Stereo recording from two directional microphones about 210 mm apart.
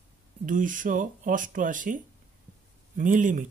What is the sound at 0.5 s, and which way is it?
Speech, 40° right (ahead or behind).